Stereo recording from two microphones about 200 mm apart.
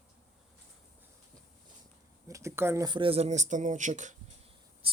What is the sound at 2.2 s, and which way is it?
Speech, 15° right (ahead or behind).